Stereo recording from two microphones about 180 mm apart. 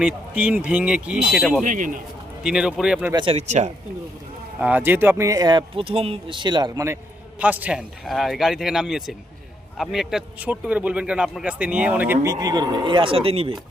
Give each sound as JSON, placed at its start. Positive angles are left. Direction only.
{"t": 0.0, "sound": "speech", "side_deg": -5}
{"t": 1.6, "sound": "a man's voice", "side_deg": -45}
{"t": 2.4, "sound": "speech", "side_deg": -5}
{"t": 3.1, "sound": "speech", "side_deg": -25}
{"t": 3.3, "sound": "speech", "side_deg": -40}
{"t": 4.6, "sound": "speech", "side_deg": -10}